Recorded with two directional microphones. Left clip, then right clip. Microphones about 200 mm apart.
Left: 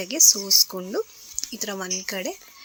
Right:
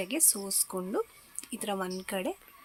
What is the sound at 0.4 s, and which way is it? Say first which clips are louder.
Speech: left 17 dB; 10° right (ahead or behind).